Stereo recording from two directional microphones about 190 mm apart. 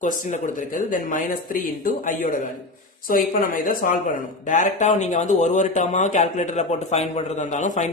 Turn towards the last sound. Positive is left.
turn(degrees=40)  # may be behind; listen again after turning